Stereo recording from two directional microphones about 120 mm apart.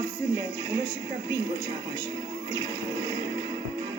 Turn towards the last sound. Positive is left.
turn(degrees=-35)  # may be behind; listen again after turning